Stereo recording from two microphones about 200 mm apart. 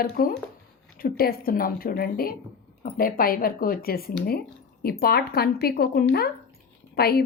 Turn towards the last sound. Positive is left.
turn(degrees=50)  # may be behind; listen again after turning